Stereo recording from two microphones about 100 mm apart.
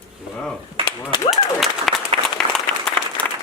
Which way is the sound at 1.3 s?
Centre (ahead or behind).